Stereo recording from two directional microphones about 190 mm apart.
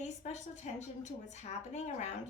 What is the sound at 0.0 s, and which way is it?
A woman's voice, 40° left (ahead or behind).